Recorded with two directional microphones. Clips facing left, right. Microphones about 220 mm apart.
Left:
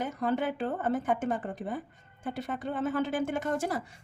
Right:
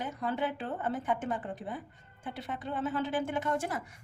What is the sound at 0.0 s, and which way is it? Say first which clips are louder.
A woman's voice: left 4 dB; 50° left (ahead or behind).